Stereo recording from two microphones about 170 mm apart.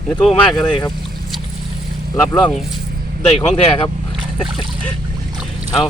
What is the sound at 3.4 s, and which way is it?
Speech, 35° left (ahead or behind).